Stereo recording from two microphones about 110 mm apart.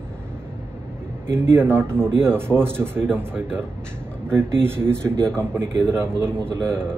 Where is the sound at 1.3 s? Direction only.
20° right (ahead or behind).